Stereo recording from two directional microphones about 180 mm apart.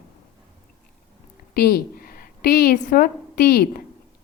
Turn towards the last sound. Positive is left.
turn(degrees=55)  # may be behind; listen again after turning